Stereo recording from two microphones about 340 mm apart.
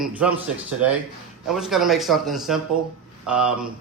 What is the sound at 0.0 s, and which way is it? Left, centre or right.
Speech, centre.